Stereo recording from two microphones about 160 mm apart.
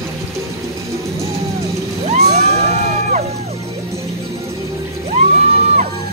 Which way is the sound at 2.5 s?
45° right (ahead or behind).